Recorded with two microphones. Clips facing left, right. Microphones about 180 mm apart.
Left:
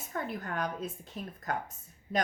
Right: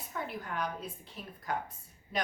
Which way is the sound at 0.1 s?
45° left (ahead or behind).